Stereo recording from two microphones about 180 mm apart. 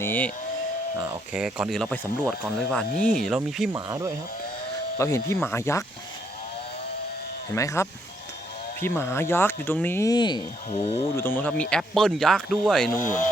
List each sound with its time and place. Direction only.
0.0 s speech: 10° left (ahead or behind)
1.3 s speech: 5° right (ahead or behind)
3.7 s speech: 15° right (ahead or behind)
4.9 s speech: 15° left (ahead or behind)
7.5 s speech: 15° left (ahead or behind)
10.7 s speech: 35° left (ahead or behind)
11.2 s speech: 10° left (ahead or behind)